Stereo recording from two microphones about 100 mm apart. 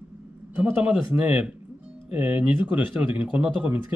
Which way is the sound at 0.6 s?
15° right (ahead or behind).